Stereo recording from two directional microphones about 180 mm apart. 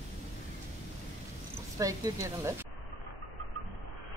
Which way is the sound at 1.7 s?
20° right (ahead or behind).